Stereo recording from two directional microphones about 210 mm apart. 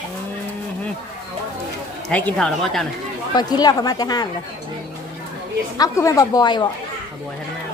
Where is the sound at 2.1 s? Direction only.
5° left (ahead or behind).